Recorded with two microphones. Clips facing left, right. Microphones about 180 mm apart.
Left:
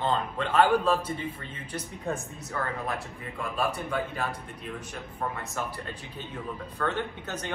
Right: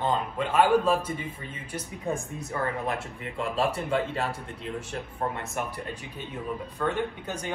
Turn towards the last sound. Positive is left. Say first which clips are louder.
# right 3 dB
turn(degrees=-10)  # may be behind; listen again after turning